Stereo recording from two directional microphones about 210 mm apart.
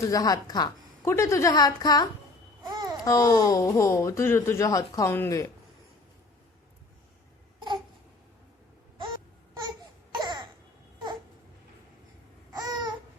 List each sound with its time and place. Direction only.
0.0 s speech: 15° left (ahead or behind)
2.6 s babbling: 20° right (ahead or behind)
3.0 s speech: 15° left (ahead or behind)
9.6 s a sound: 20° right (ahead or behind)
12.5 s babbling: 15° right (ahead or behind)